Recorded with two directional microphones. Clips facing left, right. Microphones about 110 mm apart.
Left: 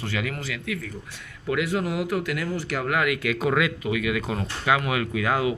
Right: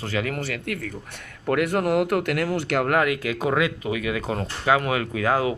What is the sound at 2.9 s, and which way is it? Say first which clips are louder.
Speech: right 2 dB; 35° right (ahead or behind).